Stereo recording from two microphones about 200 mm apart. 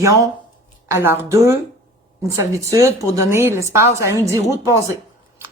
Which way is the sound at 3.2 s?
10° right (ahead or behind).